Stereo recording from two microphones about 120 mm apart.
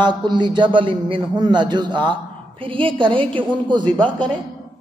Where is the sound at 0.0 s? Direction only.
40° right (ahead or behind).